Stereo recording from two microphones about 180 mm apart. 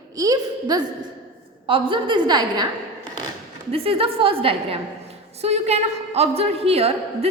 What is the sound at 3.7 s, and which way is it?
A woman's voice, 30° right (ahead or behind).